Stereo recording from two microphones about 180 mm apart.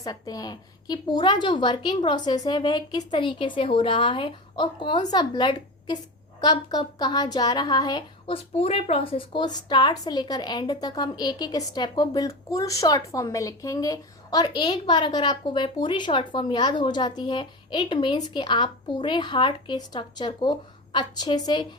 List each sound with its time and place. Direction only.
0.0 s speech: 20° left (ahead or behind)